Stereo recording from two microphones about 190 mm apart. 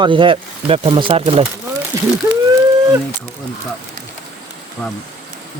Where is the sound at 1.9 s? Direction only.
15° right (ahead or behind).